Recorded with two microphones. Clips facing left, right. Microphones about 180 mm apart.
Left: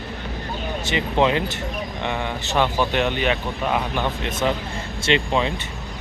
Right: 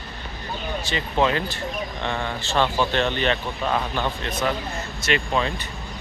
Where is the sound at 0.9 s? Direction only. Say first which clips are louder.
Left 3 dB; 20° left (ahead or behind).